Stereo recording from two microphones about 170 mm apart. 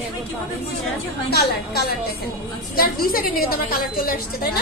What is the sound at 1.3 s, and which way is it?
A woman's voice, 70° left (ahead or behind).